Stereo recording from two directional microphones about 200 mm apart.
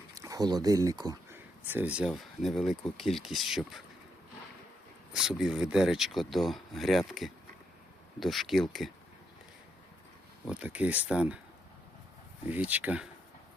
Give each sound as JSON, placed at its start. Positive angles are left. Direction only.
{"t": 0.1, "sound": "speech", "side_deg": -15}
{"t": 5.1, "sound": "speech", "side_deg": 0}
{"t": 10.4, "sound": "speech", "side_deg": -5}
{"t": 12.5, "sound": "speech", "side_deg": -10}